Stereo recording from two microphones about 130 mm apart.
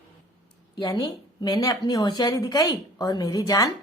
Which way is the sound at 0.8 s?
30° left (ahead or behind).